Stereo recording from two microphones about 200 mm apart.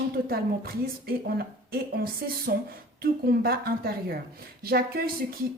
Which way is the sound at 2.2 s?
50° right (ahead or behind).